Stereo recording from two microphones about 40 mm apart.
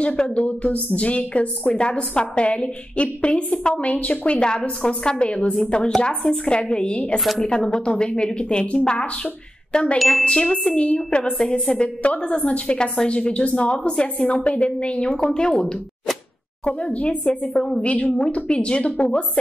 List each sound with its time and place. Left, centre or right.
0.0 s a woman's voice: left
9.9 s chime: centre
10.2 s a woman's voice: left
11.3 s a woman's voice: centre
12.0 s a woman's voice: left
16.6 s a woman's voice: left
17.8 s a woman's voice: left